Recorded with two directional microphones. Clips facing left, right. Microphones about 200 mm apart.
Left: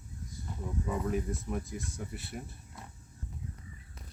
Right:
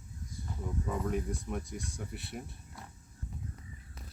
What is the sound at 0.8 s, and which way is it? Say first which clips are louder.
Stir: left 1 dB; 5° left (ahead or behind).